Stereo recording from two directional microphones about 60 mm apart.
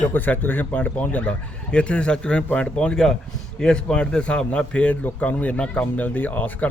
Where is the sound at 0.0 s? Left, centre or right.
Left.